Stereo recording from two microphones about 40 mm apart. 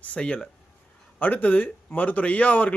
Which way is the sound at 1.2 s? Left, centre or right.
Left.